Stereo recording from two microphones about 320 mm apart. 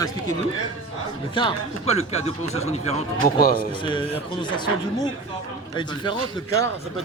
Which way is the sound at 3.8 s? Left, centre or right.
Centre.